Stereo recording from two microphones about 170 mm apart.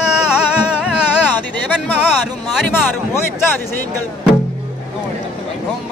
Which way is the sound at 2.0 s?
5° right (ahead or behind).